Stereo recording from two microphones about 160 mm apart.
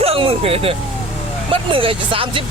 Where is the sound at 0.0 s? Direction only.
35° right (ahead or behind).